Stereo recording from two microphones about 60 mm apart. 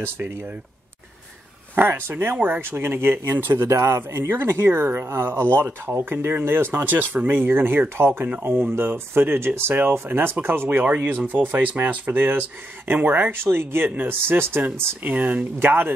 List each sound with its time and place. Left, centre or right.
0.0 s speech: right
1.8 s speech: right
3.5 s speech: right